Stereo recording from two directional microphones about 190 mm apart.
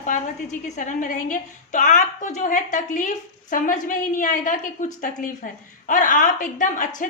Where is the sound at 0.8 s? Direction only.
45° left (ahead or behind).